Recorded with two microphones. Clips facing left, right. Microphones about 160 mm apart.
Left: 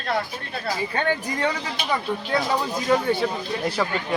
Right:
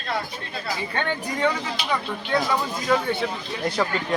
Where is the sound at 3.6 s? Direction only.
5° left (ahead or behind).